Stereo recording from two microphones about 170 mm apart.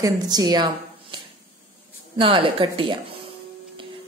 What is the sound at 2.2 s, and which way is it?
Speech, 30° right (ahead or behind).